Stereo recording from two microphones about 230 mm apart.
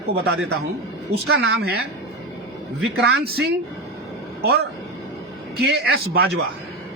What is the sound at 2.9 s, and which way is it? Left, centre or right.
Speech, right.